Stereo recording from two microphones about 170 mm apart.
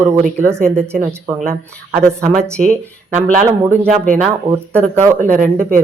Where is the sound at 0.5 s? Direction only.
5° left (ahead or behind).